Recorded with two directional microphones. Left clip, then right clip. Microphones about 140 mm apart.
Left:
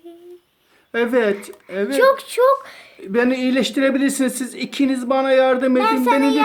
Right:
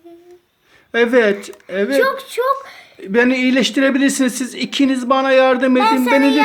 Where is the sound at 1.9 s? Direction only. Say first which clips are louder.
Left 3 dB; 75° left (ahead or behind).